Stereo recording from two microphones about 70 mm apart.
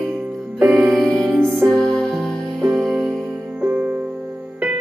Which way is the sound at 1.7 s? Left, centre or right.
Centre.